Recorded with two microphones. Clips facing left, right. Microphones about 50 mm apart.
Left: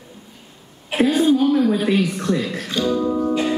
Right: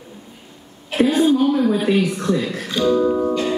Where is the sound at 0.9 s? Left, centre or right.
Centre.